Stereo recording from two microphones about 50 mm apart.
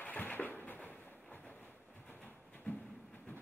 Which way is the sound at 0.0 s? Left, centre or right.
Left.